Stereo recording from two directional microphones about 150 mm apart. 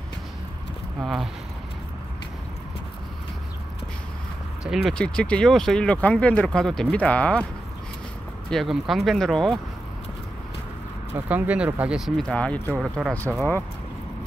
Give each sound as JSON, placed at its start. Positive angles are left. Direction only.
{"t": 1.0, "sound": "speech", "side_deg": 0}
{"t": 4.6, "sound": "speech", "side_deg": 5}
{"t": 8.5, "sound": "speech", "side_deg": 0}
{"t": 11.2, "sound": "speech", "side_deg": -10}